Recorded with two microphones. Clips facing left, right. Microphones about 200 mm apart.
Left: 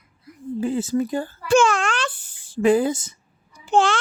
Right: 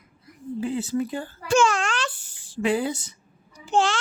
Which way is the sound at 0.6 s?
45° left (ahead or behind).